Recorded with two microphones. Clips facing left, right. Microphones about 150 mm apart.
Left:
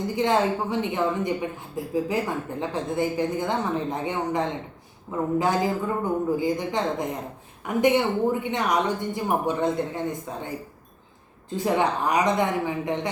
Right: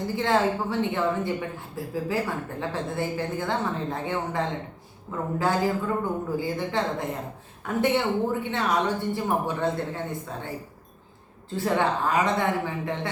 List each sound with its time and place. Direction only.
0.2 s a woman's voice: 15° left (ahead or behind)
11.5 s a woman's voice: 15° left (ahead or behind)